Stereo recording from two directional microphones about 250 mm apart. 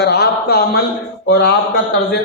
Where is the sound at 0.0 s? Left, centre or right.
Left.